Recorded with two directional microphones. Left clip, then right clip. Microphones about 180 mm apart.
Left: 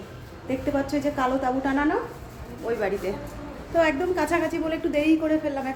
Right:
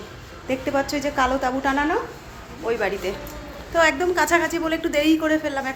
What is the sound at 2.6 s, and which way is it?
A woman's voice, 5° right (ahead or behind).